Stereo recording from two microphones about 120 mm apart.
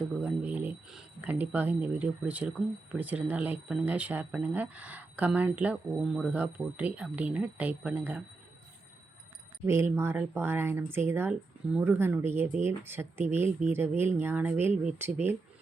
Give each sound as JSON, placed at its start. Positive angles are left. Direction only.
{"t": 0.2, "sound": "speech", "side_deg": -10}
{"t": 1.3, "sound": "speech", "side_deg": -15}
{"t": 9.6, "sound": "speech", "side_deg": -20}